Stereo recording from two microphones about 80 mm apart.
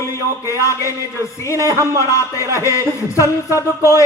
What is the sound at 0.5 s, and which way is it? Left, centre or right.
Music, left.